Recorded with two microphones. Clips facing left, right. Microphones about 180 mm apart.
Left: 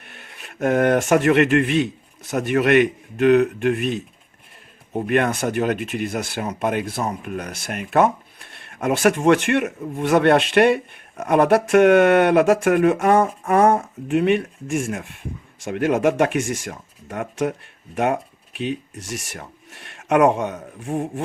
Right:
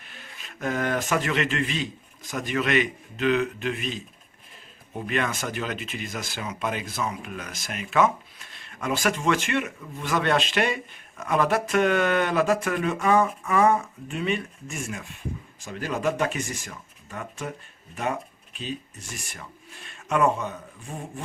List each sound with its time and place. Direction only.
0.0 s a sound: 65° left (ahead or behind)
1.1 s speech: 60° left (ahead or behind)
13.7 s speech: 45° left (ahead or behind)
14.1 s speech: 65° left (ahead or behind); by 20.6 s 85° left
20.7 s speech: 65° left (ahead or behind)